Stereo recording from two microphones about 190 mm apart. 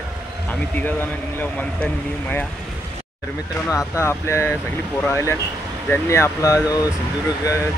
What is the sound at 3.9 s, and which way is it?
Speech, 15° left (ahead or behind).